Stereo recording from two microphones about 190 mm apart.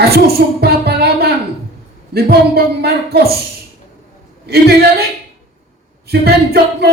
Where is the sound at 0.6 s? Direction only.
55° right (ahead or behind).